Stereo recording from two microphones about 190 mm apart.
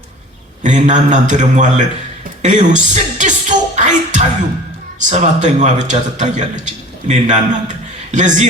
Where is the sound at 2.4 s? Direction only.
40° right (ahead or behind).